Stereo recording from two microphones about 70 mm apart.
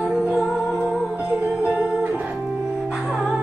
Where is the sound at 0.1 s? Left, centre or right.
Centre.